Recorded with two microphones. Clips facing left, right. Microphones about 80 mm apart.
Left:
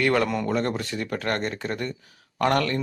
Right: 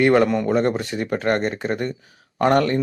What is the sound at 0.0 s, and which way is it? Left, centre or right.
Speech, right.